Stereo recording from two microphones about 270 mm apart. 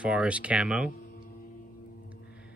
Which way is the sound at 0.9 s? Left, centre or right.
Left.